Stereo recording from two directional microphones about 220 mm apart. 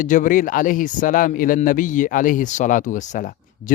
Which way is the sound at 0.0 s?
35° left (ahead or behind).